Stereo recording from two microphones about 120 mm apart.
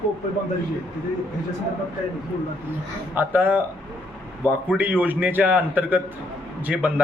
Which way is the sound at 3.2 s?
15° right (ahead or behind).